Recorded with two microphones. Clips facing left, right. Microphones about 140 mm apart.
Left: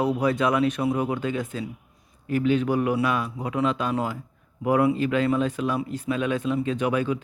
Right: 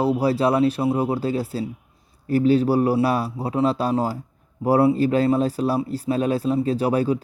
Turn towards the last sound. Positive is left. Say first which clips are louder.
# right 4 dB
turn(degrees=-35)  # may be behind; listen again after turning